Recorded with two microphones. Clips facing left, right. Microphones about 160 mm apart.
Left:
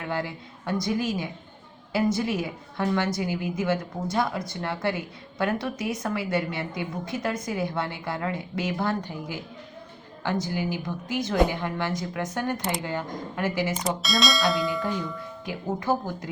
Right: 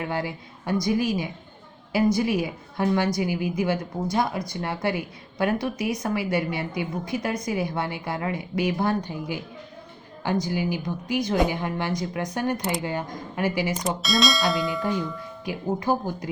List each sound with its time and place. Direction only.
0.1 s speech: 15° right (ahead or behind)
14.0 s speech: centre (ahead or behind)
15.4 s speech: 15° right (ahead or behind)